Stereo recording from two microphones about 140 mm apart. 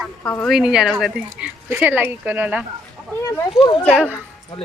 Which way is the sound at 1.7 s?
15° right (ahead or behind).